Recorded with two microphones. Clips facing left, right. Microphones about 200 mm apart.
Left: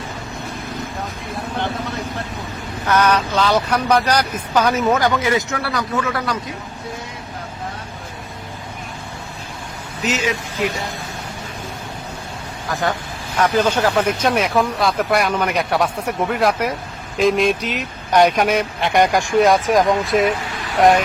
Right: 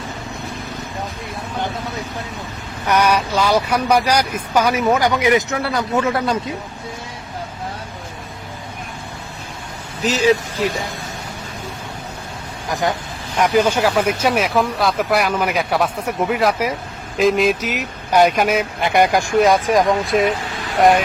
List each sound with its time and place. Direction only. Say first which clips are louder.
2.8 s speech: even; 15° right (ahead or behind)
10.0 s speech: right 6 dB; 35° right (ahead or behind)
12.6 s speech: right 1 dB; 15° right (ahead or behind); by 21.0 s centre (ahead or behind)